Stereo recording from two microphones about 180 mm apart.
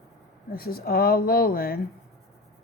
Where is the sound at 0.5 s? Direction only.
55° left (ahead or behind).